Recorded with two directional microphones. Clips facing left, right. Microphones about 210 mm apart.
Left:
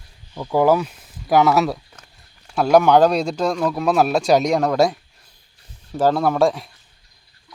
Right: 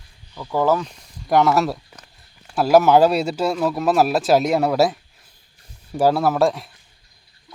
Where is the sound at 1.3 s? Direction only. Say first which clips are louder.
Left 1 dB; centre (ahead or behind).